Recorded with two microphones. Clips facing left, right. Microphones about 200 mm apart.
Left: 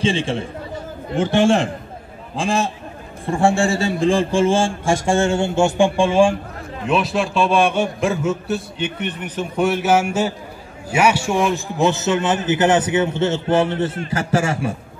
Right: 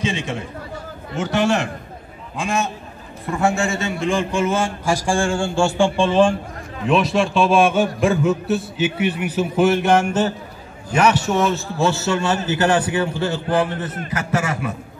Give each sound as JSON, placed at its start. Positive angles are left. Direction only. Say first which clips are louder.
{"t": 0.0, "sound": "a man's voice", "louder": "left 4 dB", "side_deg": 30}